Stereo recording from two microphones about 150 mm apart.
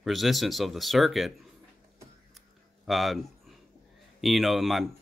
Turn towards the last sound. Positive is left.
turn(degrees=0)  # may be behind; listen again after turning